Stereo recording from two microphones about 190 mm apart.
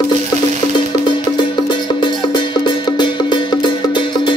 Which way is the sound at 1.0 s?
25° left (ahead or behind).